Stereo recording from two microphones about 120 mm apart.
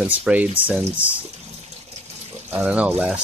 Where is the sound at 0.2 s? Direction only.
10° right (ahead or behind).